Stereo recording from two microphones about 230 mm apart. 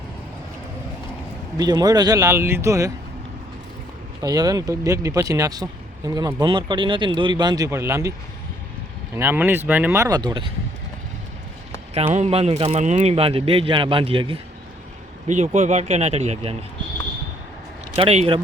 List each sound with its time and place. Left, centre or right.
1.5 s speech: centre
4.2 s speech: centre
9.1 s speech: centre
12.1 s speech: right
17.9 s speech: right